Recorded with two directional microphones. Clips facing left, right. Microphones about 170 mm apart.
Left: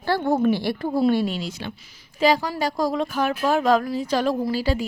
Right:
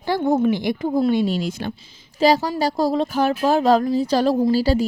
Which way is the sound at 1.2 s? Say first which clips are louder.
Right 5 dB; 45° right (ahead or behind).